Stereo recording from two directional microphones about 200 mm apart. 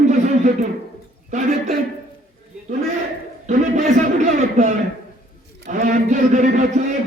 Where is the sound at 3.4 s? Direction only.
35° right (ahead or behind).